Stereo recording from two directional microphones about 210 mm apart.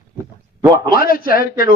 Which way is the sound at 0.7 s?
45° left (ahead or behind).